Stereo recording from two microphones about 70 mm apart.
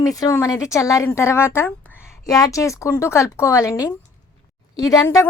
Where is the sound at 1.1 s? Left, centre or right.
Left.